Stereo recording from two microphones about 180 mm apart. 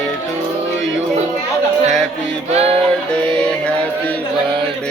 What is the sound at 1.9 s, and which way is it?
Speech, centre (ahead or behind).